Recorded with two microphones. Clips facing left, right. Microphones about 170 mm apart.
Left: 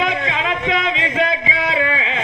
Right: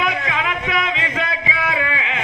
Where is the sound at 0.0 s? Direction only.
25° left (ahead or behind).